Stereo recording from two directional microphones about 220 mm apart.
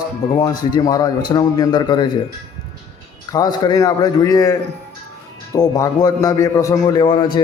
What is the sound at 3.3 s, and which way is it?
A man's voice, 15° left (ahead or behind).